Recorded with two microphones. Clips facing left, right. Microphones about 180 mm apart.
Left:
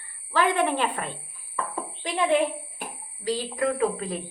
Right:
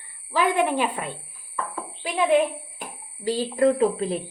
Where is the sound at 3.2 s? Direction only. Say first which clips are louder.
Right 5 dB; 25° right (ahead or behind).